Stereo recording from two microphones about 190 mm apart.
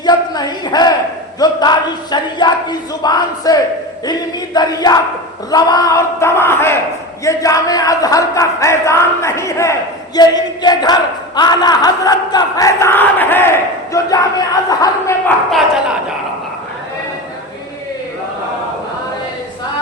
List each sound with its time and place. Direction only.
0.0 s speech: 20° left (ahead or behind)
1.4 s battle cry: 20° left (ahead or behind)
5.5 s speech: 20° left (ahead or behind)
10.2 s battle cry: 20° left (ahead or behind)